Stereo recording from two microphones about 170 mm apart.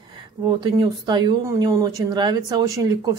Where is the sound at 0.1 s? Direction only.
25° right (ahead or behind).